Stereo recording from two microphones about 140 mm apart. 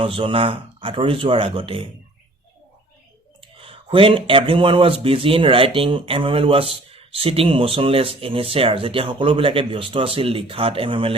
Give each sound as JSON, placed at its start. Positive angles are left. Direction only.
{"t": 0.0, "sound": "speech", "side_deg": -40}
{"t": 3.6, "sound": "speech", "side_deg": -40}